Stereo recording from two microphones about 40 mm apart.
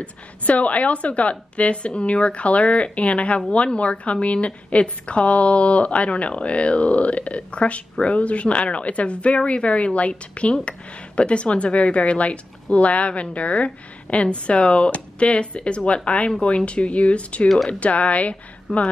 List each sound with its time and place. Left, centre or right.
0.0 s a woman's voice: left